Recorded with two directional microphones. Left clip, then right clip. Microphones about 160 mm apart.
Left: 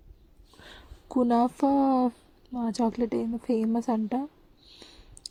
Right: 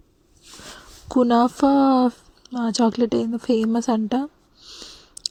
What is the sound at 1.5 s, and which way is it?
Speech, 20° right (ahead or behind).